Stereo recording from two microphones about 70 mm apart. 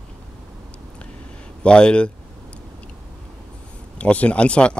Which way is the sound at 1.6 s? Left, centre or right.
Centre.